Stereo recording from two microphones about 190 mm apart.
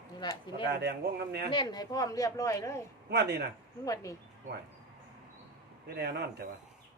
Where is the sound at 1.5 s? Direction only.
25° left (ahead or behind).